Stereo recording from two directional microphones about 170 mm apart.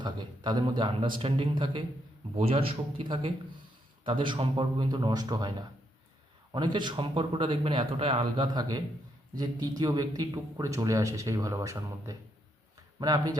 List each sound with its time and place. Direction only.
0.0 s a man's voice: 25° right (ahead or behind)